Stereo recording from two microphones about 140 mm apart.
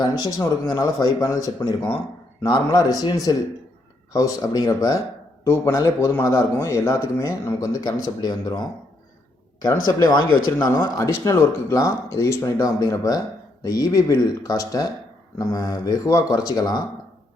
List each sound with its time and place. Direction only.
0.0 s speech: 25° left (ahead or behind)